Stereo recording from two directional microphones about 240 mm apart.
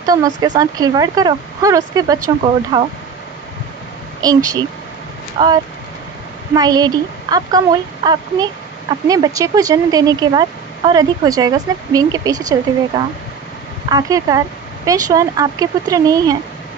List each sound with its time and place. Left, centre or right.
0.0 s speech: centre
4.2 s speech: centre